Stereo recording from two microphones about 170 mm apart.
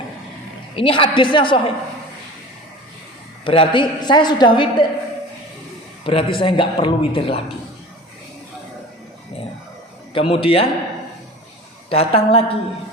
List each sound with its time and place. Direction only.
0.8 s a woman's voice: 30° left (ahead or behind)
3.4 s a woman's voice: 30° left (ahead or behind)
6.1 s a man's voice: 30° left (ahead or behind)
10.2 s a man's voice: 30° left (ahead or behind)
11.9 s a man's voice: 35° left (ahead or behind)